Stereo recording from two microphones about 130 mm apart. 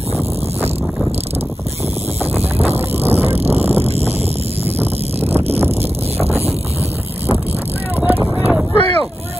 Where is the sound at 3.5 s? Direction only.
50° right (ahead or behind).